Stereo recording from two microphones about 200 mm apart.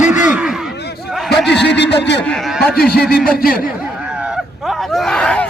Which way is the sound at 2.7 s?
50° left (ahead or behind).